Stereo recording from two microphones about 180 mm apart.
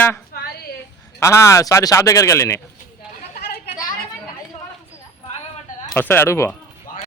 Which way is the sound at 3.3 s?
55° left (ahead or behind).